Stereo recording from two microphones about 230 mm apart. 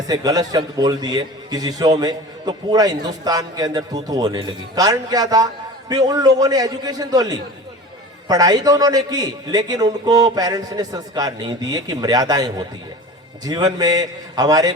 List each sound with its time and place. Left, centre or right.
0.1 s a man's voice: centre